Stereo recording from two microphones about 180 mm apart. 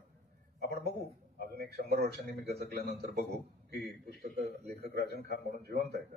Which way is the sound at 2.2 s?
60° right (ahead or behind).